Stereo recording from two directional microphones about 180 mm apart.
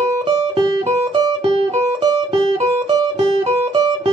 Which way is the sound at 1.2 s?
30° right (ahead or behind).